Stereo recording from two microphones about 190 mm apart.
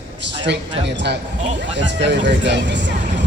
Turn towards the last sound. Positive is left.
turn(degrees=-70)  # may be behind; listen again after turning